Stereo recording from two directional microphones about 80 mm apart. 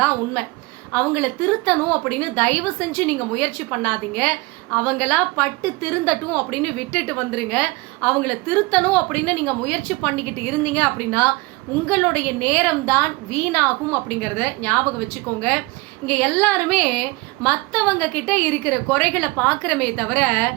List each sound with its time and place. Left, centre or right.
0.9 s a woman's voice: left